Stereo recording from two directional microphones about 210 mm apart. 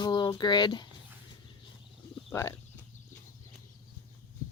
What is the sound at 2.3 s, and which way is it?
Speech, 15° left (ahead or behind).